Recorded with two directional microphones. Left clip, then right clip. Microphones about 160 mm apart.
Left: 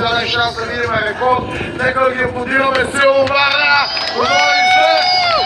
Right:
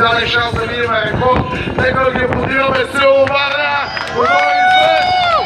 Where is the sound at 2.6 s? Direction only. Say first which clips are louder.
Even; 55° right (ahead or behind).